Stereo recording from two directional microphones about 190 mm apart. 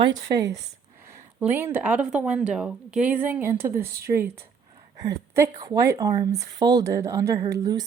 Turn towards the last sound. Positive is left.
turn(degrees=-20)  # may be behind; listen again after turning